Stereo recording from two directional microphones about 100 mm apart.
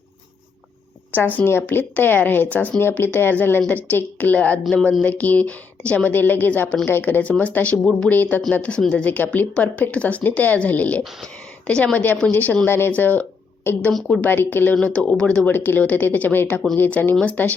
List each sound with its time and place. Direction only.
1.1 s speech: 15° left (ahead or behind)